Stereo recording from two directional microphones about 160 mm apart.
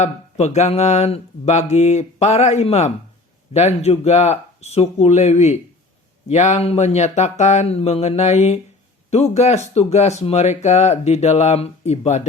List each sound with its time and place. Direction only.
0.0 s speech: 45° left (ahead or behind)